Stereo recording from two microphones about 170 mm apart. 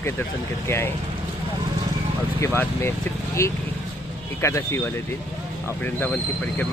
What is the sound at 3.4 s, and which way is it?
Speech, 20° left (ahead or behind).